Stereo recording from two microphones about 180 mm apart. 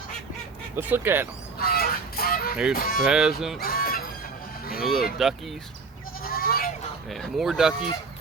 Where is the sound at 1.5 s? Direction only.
55° left (ahead or behind).